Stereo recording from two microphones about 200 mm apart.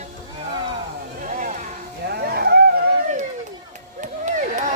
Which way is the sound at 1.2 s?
40° right (ahead or behind).